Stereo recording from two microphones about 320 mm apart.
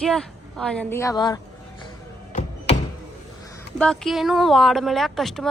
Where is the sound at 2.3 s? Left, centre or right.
Left.